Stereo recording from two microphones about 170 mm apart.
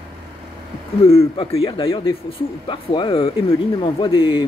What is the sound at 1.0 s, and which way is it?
Speech, 35° left (ahead or behind).